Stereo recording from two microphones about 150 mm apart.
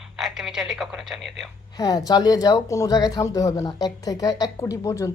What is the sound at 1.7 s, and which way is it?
Speech, 25° left (ahead or behind).